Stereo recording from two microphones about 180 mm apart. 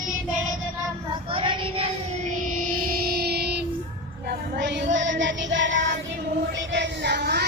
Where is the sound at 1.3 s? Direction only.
30° right (ahead or behind).